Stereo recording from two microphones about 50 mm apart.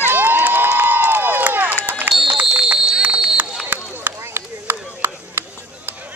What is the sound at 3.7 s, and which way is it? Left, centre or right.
Chop, right.